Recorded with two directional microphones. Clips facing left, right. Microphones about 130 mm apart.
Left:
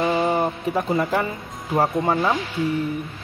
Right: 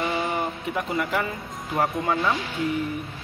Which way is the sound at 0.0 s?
30° left (ahead or behind).